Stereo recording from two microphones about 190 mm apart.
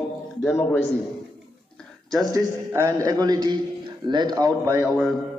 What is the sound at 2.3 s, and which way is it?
A man's voice, 15° right (ahead or behind).